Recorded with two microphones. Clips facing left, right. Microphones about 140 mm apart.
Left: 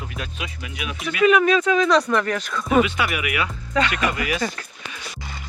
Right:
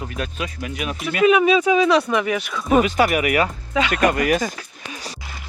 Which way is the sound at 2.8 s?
40° right (ahead or behind).